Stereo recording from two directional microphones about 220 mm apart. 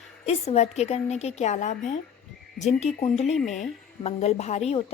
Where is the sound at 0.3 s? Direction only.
30° left (ahead or behind).